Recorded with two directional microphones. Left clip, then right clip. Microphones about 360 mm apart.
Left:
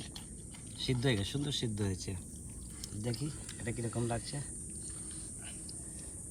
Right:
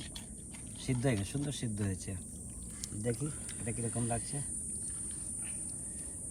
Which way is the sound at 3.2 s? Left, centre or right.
Centre.